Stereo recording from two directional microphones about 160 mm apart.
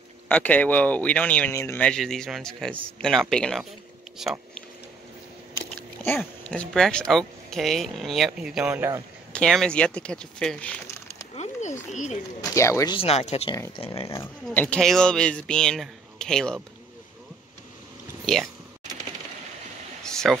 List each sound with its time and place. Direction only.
0.3 s speech: 10° left (ahead or behind)
6.1 s speech: 5° left (ahead or behind); by 9.0 s 15° right (ahead or behind)
9.3 s speech: 5° left (ahead or behind)
11.3 s a sound: 45° left (ahead or behind)
12.4 s speech: 20° left (ahead or behind)
12.9 s speech: 40° left (ahead or behind)
14.0 s speech: 20° left (ahead or behind)
18.2 s speech: centre (ahead or behind)
20.0 s a sound: 5° left (ahead or behind)